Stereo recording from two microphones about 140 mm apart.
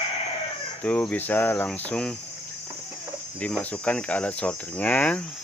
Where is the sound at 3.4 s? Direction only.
10° left (ahead or behind).